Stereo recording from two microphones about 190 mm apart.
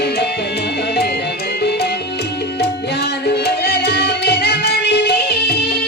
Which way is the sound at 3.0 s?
60° left (ahead or behind).